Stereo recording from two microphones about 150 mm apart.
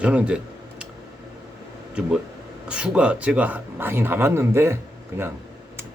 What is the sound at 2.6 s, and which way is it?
Speech, 5° right (ahead or behind).